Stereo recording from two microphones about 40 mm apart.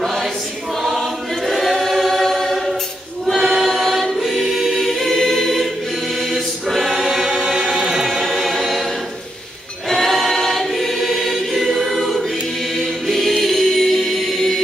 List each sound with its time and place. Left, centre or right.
0.0 s choir: centre
7.5 s music: centre
8.1 s music: centre
9.8 s choir: centre